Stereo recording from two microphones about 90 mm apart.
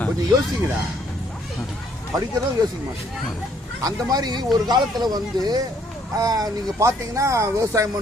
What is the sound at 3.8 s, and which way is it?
Speech, 45° right (ahead or behind).